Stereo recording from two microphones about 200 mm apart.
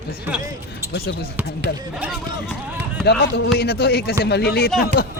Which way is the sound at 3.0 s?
55° left (ahead or behind).